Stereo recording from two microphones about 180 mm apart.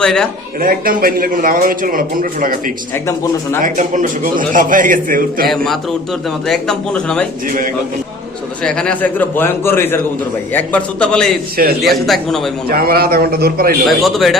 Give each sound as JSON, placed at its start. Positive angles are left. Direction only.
{"t": 0.0, "sound": "speech", "side_deg": 5}
{"t": 0.6, "sound": "a man's voice", "side_deg": -50}
{"t": 2.9, "sound": "a man's voice", "side_deg": 10}
{"t": 3.6, "sound": "a man's voice", "side_deg": -45}
{"t": 5.5, "sound": "speech", "side_deg": 0}
{"t": 7.4, "sound": "a man's voice", "side_deg": -50}
{"t": 8.6, "sound": "a man's voice", "side_deg": 5}
{"t": 12.6, "sound": "a man's voice", "side_deg": -55}
{"t": 13.8, "sound": "speech", "side_deg": 0}